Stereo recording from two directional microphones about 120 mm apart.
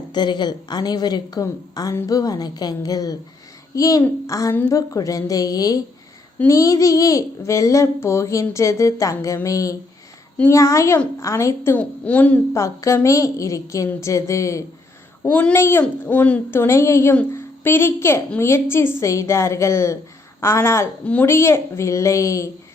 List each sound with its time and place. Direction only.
0.1 s a woman's voice: 40° left (ahead or behind); by 11.8 s 20° left (ahead or behind)
11.8 s a woman's voice: 10° left (ahead or behind)
12.5 s a child's voice: 25° left (ahead or behind)
15.2 s a woman's voice: 10° left (ahead or behind)
15.5 s a child's voice: 20° left (ahead or behind)